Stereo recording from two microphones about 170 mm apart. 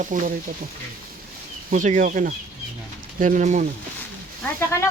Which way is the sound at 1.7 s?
45° right (ahead or behind).